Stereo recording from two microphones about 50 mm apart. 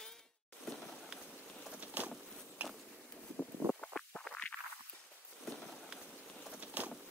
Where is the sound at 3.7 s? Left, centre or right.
Left.